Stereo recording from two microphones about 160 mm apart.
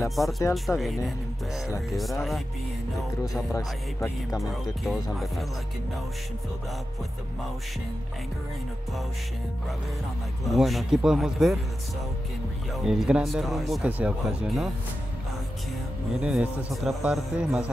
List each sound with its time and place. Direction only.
0.1 s speech: centre (ahead or behind)
3.5 s speech: 20° left (ahead or behind)
4.4 s speech: centre (ahead or behind)
10.4 s speech: centre (ahead or behind)
12.7 s speech: centre (ahead or behind)
16.2 s speech: 5° right (ahead or behind)